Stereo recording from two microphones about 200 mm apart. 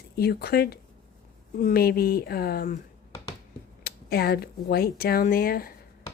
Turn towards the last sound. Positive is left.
turn(degrees=45)  # may be behind; listen again after turning